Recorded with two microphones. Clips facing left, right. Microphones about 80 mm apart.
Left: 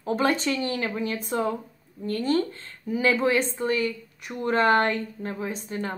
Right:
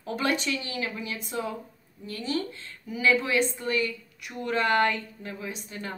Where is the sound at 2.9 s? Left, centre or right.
Left.